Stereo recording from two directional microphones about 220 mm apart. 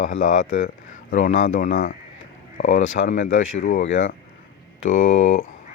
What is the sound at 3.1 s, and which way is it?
Speech, 35° left (ahead or behind).